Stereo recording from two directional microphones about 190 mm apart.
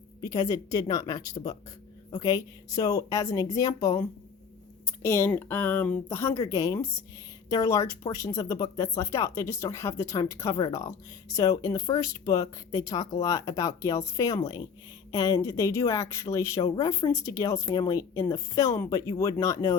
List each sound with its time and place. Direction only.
0.2 s speech: 20° left (ahead or behind)
2.2 s speech: 20° left (ahead or behind)